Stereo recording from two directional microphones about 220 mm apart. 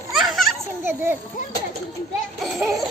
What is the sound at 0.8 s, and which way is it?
Speech, 10° right (ahead or behind).